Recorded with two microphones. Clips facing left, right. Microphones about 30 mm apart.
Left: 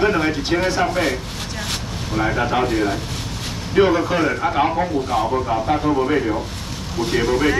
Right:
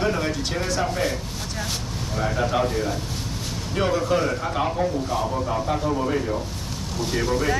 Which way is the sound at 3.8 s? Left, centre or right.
Left.